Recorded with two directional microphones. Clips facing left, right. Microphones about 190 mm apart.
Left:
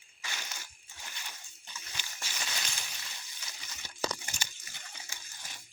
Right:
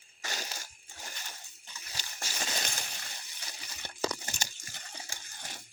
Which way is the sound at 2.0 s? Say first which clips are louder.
Right 4 dB; 40° right (ahead or behind).